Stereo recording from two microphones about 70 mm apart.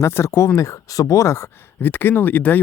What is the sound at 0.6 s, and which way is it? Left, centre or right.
Speech, left.